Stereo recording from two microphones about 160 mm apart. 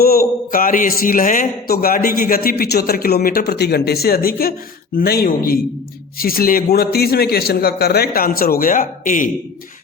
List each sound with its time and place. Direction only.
0.0 s a man's voice: 70° left (ahead or behind)